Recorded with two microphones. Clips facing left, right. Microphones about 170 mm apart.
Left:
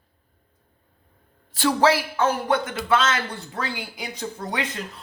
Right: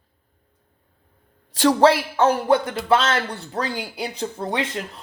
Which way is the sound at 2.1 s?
35° right (ahead or behind).